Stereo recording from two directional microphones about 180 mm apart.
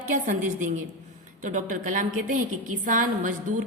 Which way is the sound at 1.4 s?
45° right (ahead or behind).